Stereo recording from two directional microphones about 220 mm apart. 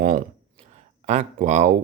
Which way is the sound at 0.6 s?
30° right (ahead or behind).